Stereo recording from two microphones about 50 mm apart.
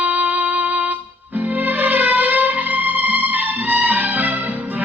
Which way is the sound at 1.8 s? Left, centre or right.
Right.